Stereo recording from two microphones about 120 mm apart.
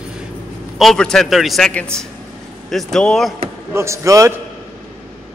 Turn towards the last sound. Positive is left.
turn(degrees=-25)  # may be behind; listen again after turning